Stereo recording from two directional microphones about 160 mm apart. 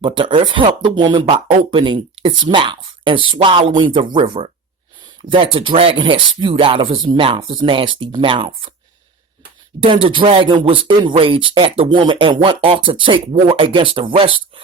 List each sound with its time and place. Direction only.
0.0 s speech: 30° right (ahead or behind)
9.8 s speech: 30° right (ahead or behind)